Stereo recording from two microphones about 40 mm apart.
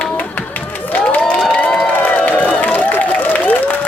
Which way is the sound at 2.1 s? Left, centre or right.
Left.